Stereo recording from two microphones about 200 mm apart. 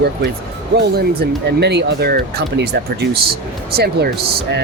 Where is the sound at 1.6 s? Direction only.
55° right (ahead or behind).